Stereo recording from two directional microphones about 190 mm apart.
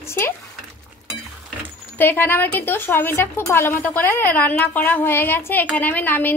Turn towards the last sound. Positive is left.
turn(degrees=10)  # may be behind; listen again after turning